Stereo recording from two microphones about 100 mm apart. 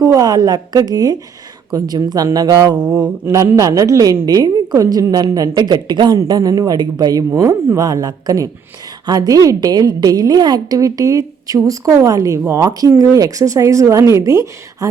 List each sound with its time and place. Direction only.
0.0 s a woman's voice: 35° right (ahead or behind)
3.2 s a woman's voice: 30° right (ahead or behind)